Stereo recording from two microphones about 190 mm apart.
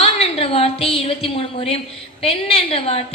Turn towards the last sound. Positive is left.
turn(degrees=30)  # may be behind; listen again after turning